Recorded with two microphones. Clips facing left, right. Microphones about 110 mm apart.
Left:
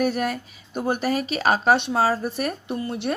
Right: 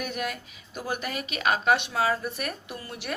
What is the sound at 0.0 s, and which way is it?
Speech, 40° left (ahead or behind).